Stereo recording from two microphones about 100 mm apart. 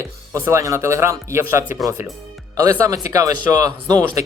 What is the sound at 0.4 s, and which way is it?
Speech, 30° right (ahead or behind).